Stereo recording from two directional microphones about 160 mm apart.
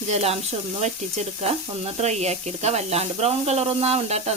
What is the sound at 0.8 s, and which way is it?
Speech, 45° right (ahead or behind).